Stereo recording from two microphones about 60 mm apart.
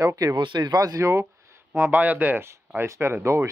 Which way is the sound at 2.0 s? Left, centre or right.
Right.